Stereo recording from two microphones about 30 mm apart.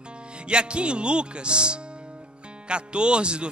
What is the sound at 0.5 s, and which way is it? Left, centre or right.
Speech, right.